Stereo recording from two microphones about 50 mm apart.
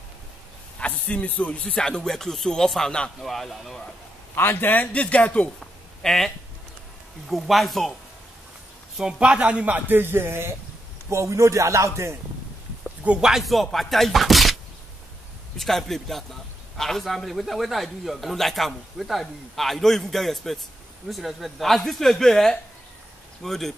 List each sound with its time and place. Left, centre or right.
0.7 s a sound: left
1.6 s a man's voice: centre
4.4 s a man's voice: left
5.1 s speech: left
5.6 s a sound: centre
7.2 s a man's voice: centre
9.2 s speech: right
9.9 s speech: right
11.1 s a man's voice: right
13.2 s a man's voice: centre